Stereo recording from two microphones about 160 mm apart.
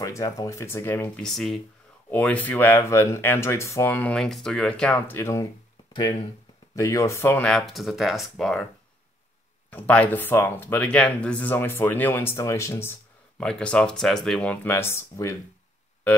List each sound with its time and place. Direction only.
0.0 s speech: 20° left (ahead or behind)
1.2 s speech: centre (ahead or behind); by 5.5 s 20° left (ahead or behind)
6.7 s speech: 20° left (ahead or behind)
7.5 s speech: centre (ahead or behind)
9.7 s speech: 10° left (ahead or behind)
13.4 s speech: 5° left (ahead or behind)